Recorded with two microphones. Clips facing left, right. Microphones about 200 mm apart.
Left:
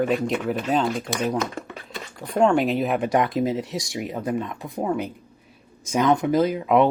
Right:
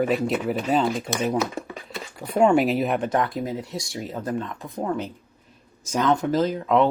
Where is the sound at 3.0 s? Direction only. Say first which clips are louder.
Left 3 dB; 15° left (ahead or behind).